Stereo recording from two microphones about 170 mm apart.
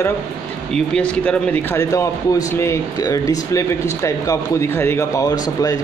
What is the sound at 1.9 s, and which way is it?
Speech, 20° left (ahead or behind).